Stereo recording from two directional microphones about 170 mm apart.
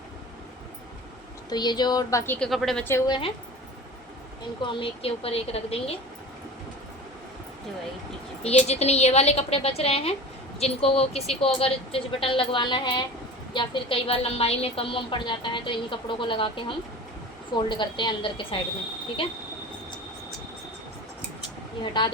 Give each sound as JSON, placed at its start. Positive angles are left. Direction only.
{"t": 1.5, "sound": "a woman's voice", "side_deg": 25}
{"t": 2.5, "sound": "speech", "side_deg": 0}
{"t": 3.1, "sound": "speech", "side_deg": 30}
{"t": 4.6, "sound": "speech", "side_deg": 30}
{"t": 8.4, "sound": "a woman's voice", "side_deg": 40}